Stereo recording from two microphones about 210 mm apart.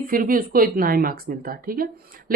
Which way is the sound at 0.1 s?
40° right (ahead or behind).